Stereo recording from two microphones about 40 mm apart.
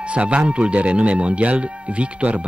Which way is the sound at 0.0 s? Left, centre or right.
Right.